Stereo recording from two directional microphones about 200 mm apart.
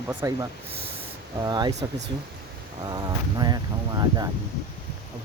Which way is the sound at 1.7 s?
35° right (ahead or behind).